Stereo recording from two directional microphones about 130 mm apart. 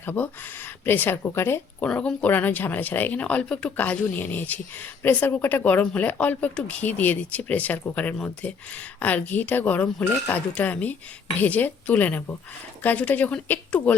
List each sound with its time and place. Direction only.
0.0 s speech: 15° left (ahead or behind)
1.9 s speech: 10° left (ahead or behind)